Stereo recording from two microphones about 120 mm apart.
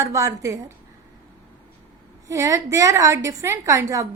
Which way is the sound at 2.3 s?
25° right (ahead or behind).